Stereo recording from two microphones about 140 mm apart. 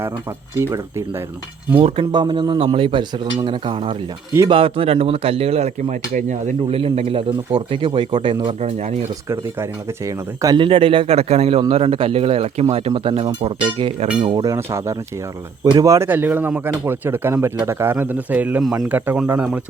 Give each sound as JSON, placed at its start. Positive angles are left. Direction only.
{"t": 1.8, "sound": "speech", "side_deg": -35}
{"t": 10.4, "sound": "speech", "side_deg": -35}